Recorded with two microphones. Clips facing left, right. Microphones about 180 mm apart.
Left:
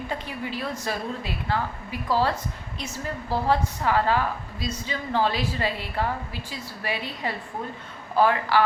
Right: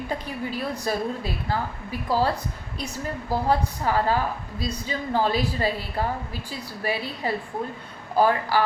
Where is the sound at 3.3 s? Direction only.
10° right (ahead or behind).